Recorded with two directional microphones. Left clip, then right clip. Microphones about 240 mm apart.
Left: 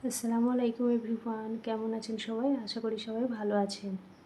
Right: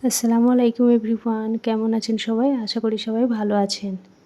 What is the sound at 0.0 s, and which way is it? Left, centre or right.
Speech, right.